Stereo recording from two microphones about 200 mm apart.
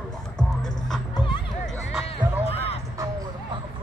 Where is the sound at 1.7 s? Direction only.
5° right (ahead or behind).